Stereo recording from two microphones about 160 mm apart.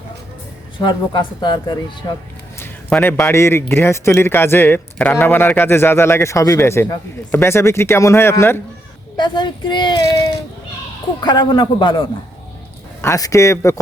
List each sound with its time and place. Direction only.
0.8 s speech: 30° left (ahead or behind)
2.9 s a man's voice: 15° left (ahead or behind)
9.1 s speech: 30° left (ahead or behind)
13.0 s speech: 20° left (ahead or behind)